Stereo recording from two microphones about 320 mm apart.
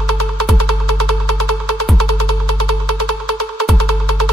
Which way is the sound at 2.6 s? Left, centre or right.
Right.